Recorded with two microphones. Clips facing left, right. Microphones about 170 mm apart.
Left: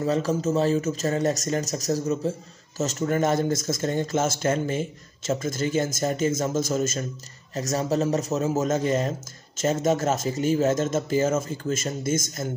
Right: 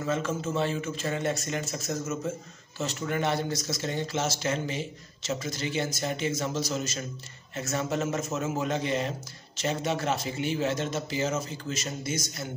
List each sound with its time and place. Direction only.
0.0 s a man's voice: 35° left (ahead or behind)